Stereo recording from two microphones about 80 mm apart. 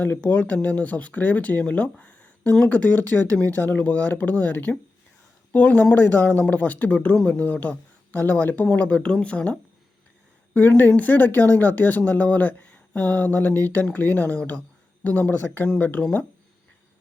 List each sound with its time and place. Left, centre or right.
0.0 s speech: left